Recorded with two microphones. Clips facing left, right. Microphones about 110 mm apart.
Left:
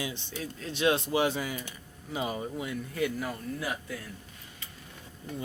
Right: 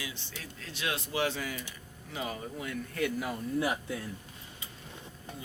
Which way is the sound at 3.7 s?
20° right (ahead or behind).